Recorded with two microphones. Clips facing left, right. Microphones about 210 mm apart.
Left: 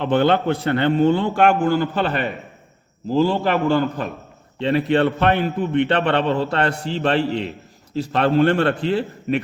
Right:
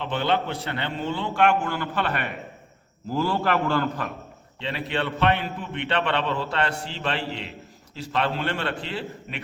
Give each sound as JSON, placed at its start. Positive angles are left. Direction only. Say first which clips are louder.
{"t": 0.0, "sound": "a man's voice", "louder": "left 8 dB", "side_deg": 50}
{"t": 4.6, "sound": "a man's voice", "louder": "left 11 dB", "side_deg": 45}